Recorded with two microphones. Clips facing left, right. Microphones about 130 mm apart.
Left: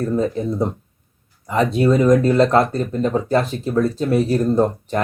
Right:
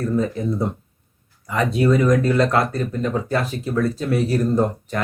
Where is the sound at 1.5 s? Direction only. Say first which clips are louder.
Left 2 dB; 30° left (ahead or behind).